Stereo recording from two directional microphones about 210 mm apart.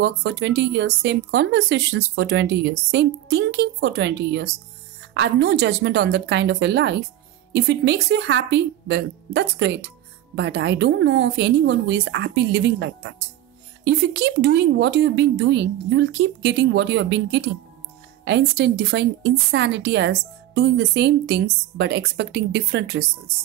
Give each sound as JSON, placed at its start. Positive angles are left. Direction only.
{"t": 0.0, "sound": "speech", "side_deg": -55}